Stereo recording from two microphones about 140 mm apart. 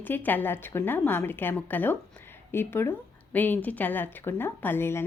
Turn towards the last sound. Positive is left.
turn(degrees=15)  # may be behind; listen again after turning